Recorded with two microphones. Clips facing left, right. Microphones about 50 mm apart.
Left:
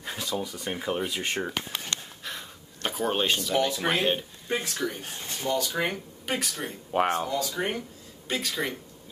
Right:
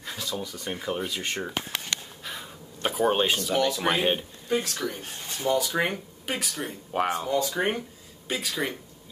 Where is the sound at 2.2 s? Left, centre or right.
Centre.